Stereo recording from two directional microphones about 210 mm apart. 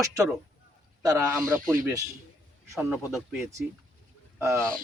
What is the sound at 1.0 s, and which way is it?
Speech, 15° right (ahead or behind).